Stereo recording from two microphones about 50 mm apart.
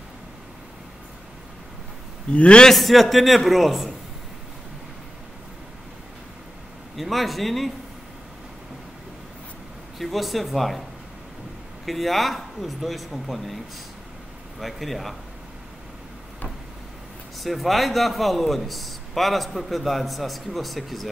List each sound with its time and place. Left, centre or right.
2.3 s a man's voice: left
2.7 s a man's voice: centre
7.0 s a man's voice: centre
9.9 s a man's voice: centre
11.8 s a man's voice: centre
14.6 s a man's voice: centre
17.4 s a man's voice: centre